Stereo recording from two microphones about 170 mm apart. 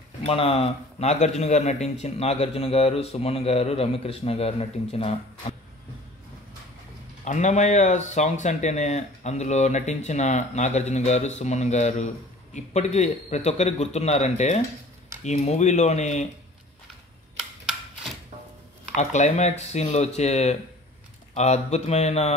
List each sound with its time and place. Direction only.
0.2 s speech: 35° left (ahead or behind)
7.2 s speech: 45° left (ahead or behind)
18.9 s speech: 45° left (ahead or behind)